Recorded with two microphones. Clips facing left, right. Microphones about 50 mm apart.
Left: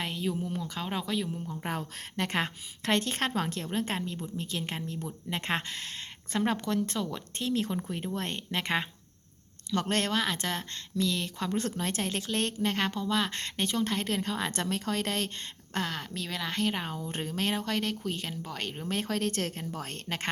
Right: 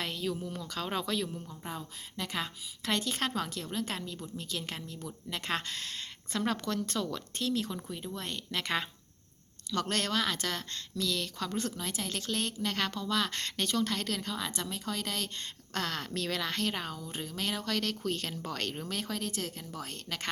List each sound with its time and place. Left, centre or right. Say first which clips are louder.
0.0 s a woman's voice: left 2 dB; left
1.6 s a woman's voice: left 7 dB; left
8.4 s speech: left 2 dB; left
9.9 s speech: left 3 dB; left
11.8 s a woman's voice: left 5 dB; left
15.7 s a woman's voice: left 1 dB; centre
17.1 s a woman's voice: left 6 dB; left
18.0 s a woman's voice: even; centre
18.9 s a woman's voice: left 5 dB; left